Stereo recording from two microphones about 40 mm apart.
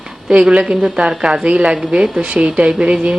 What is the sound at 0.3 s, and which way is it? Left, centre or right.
A woman's voice, right.